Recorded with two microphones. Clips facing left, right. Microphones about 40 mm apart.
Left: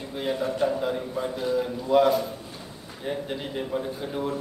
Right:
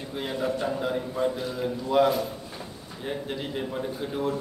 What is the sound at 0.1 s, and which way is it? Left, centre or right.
A man's voice, centre.